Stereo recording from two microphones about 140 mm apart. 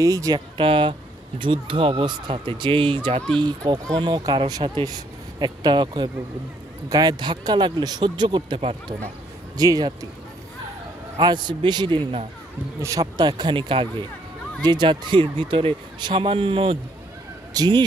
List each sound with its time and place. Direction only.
0.0 s speech: 25° right (ahead or behind)
0.6 s speech: 40° right (ahead or behind)
3.3 s speech: 30° right (ahead or behind)
11.1 s speech: 30° right (ahead or behind)
12.8 s speech: 25° right (ahead or behind)